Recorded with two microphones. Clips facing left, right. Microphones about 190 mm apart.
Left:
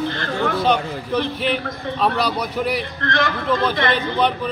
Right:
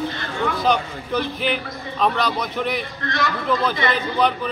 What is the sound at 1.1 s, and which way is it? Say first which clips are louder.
A man's voice: left 1 dB; centre (ahead or behind).